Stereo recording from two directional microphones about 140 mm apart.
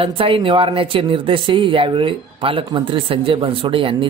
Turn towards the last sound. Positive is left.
turn(degrees=-40)  # may be behind; listen again after turning